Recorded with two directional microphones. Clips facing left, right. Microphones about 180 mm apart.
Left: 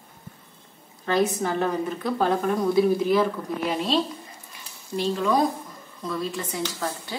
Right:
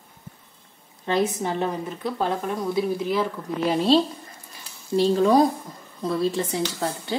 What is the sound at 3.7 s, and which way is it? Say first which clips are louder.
Speech: right 6 dB; 30° right (ahead or behind).